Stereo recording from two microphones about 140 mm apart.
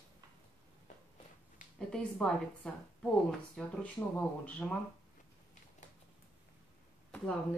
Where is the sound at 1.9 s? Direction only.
5° left (ahead or behind).